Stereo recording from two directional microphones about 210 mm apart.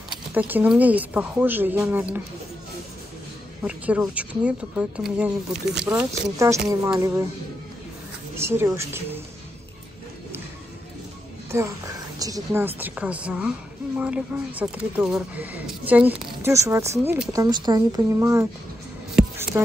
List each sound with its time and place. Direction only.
0.3 s speech: 10° right (ahead or behind)
3.6 s speech: 5° right (ahead or behind)
8.4 s speech: 10° right (ahead or behind)
11.5 s speech: 10° right (ahead or behind)
19.1 s music: 10° right (ahead or behind)